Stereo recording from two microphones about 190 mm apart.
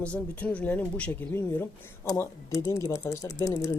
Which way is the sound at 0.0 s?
5° left (ahead or behind).